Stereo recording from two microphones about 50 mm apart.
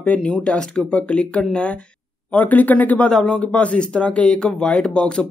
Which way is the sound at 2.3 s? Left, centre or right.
Left.